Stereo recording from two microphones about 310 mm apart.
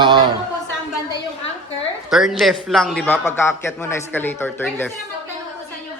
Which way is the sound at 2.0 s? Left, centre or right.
Centre.